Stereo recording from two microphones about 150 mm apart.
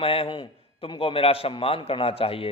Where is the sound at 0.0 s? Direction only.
40° left (ahead or behind).